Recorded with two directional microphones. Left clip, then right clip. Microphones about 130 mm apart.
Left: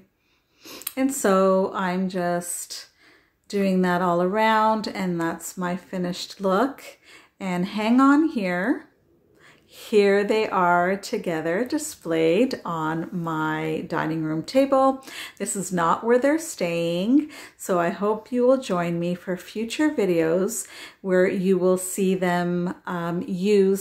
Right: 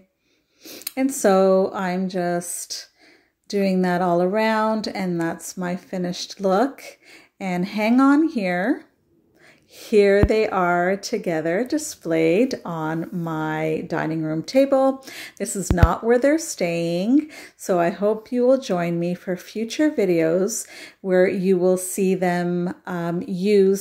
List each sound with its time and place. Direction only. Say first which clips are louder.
0.8 s speech: right 3 dB; 25° right (ahead or behind)
9.8 s speech: right 3 dB; 25° right (ahead or behind)